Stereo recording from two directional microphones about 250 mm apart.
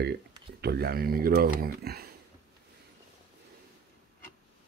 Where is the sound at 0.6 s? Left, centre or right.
Right.